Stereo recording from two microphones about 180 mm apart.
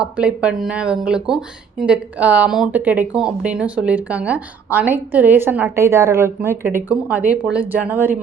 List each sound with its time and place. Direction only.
0.0 s speech: 5° right (ahead or behind)